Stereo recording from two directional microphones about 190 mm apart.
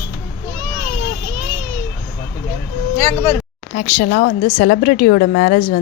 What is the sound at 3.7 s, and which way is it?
A woman's voice, 50° left (ahead or behind).